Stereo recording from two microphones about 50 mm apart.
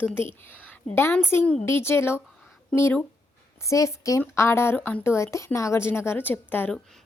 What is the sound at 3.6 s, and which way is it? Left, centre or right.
A woman's voice, left.